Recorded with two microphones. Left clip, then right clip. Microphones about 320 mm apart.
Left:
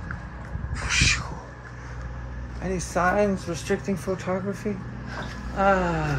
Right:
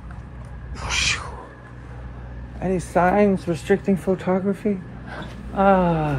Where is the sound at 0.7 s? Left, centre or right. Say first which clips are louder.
Even; centre.